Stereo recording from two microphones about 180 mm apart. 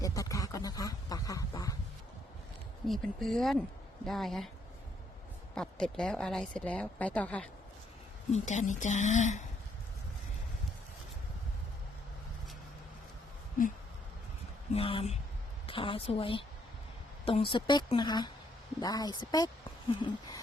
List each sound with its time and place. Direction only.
0.0 s a sound: 20° left (ahead or behind)
2.8 s a woman's voice: centre (ahead or behind)
5.5 s a woman's voice: 5° left (ahead or behind)
8.3 s a woman's voice: 40° left (ahead or behind)
14.7 s a woman's voice: 30° left (ahead or behind)